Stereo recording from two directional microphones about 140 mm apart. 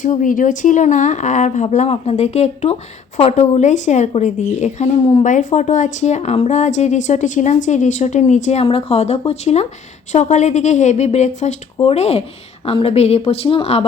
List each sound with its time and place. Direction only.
0.0 s speech: 65° left (ahead or behind)
8.6 s speech: 45° left (ahead or behind)